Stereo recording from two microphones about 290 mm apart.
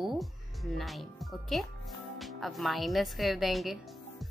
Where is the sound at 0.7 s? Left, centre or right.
Centre.